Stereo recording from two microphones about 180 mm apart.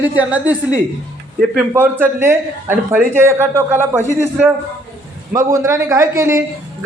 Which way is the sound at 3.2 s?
15° right (ahead or behind).